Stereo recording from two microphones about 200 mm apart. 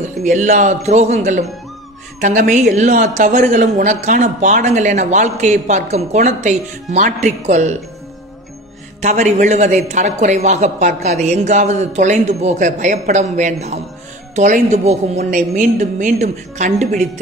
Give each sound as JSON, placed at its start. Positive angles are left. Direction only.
{"t": 0.2, "sound": "speech", "side_deg": -35}
{"t": 9.0, "sound": "speech", "side_deg": -35}